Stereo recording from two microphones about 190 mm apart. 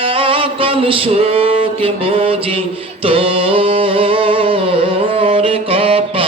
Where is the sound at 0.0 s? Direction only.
30° right (ahead or behind).